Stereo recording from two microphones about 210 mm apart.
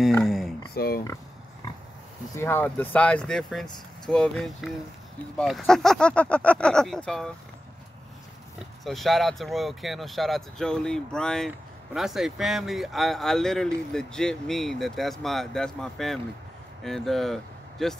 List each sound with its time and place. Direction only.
0.2 s speech: centre (ahead or behind)
0.7 s speech: 45° left (ahead or behind)
2.3 s speech: 10° left (ahead or behind)
8.5 s speech: centre (ahead or behind)